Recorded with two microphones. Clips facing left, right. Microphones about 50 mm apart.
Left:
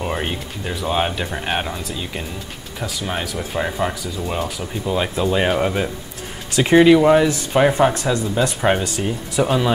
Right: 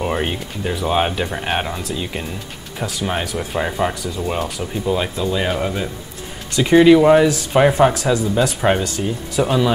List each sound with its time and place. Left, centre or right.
0.0 s speech: centre
5.1 s speech: centre
6.7 s speech: centre
9.4 s speech: centre